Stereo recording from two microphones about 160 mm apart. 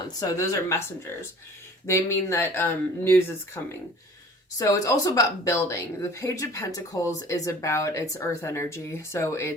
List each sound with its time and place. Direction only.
0.0 s a woman's voice: 25° left (ahead or behind)
1.9 s a woman's voice: 15° left (ahead or behind)